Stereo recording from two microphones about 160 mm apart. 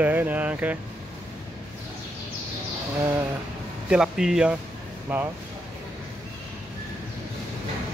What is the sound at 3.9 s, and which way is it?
Speech, 5° right (ahead or behind).